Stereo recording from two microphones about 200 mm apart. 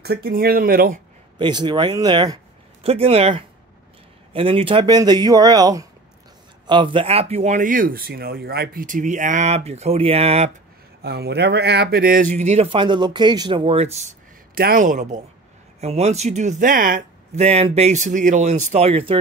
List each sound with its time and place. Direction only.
0.0 s speech: 50° right (ahead or behind)
1.4 s speech: 20° right (ahead or behind)
11.0 s speech: 55° right (ahead or behind); by 14.1 s 30° right (ahead or behind)
14.5 s speech: 45° right (ahead or behind); by 19.1 s 30° right (ahead or behind)